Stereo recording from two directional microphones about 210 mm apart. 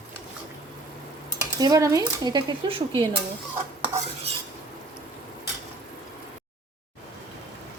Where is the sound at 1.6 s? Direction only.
15° right (ahead or behind).